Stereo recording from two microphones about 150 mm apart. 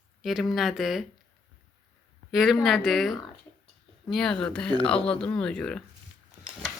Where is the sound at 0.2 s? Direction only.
Centre (ahead or behind).